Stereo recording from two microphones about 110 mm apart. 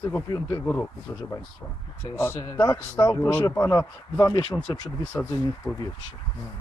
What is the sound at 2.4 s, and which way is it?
Speech, 35° left (ahead or behind).